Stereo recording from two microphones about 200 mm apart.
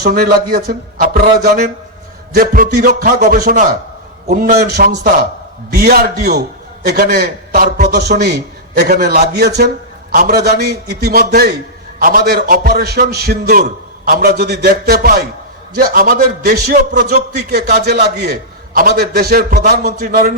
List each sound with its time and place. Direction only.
0.0 s a man's voice: 50° right (ahead or behind)
2.3 s a man's voice: 45° right (ahead or behind)